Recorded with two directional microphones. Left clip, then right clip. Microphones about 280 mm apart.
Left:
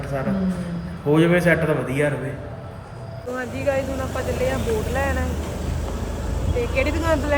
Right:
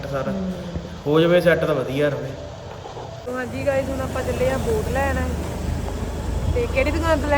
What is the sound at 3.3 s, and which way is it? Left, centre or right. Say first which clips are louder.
Speech: even; centre.